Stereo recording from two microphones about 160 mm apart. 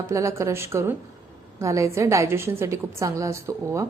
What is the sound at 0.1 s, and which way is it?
A woman's voice, 20° right (ahead or behind).